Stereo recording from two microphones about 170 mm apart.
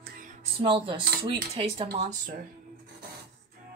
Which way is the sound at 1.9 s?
40° right (ahead or behind).